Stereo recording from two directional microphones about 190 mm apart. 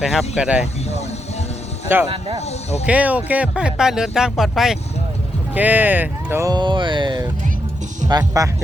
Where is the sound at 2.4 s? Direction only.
35° left (ahead or behind).